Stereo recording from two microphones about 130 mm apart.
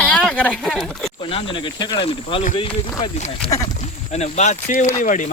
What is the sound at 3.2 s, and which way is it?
Speech, 60° left (ahead or behind).